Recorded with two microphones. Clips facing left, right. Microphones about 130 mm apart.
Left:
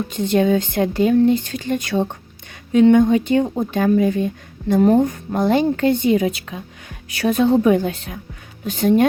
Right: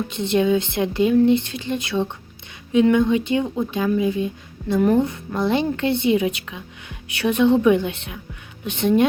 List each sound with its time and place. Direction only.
0.1 s speech: 45° left (ahead or behind)
4.8 s a woman's voice: 40° left (ahead or behind)